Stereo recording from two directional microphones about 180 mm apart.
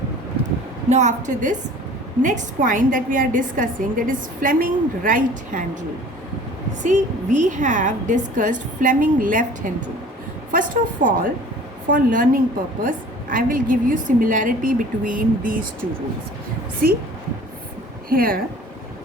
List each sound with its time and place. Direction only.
0.9 s a woman's voice: 40° right (ahead or behind)
6.8 s a woman's voice: 45° right (ahead or behind)
18.1 s a woman's voice: 55° right (ahead or behind)